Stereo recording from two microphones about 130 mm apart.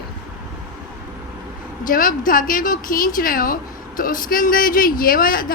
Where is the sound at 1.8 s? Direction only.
90° left.